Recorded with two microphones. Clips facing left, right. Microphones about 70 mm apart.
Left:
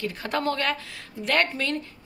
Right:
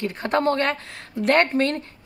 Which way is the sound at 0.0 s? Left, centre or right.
Right.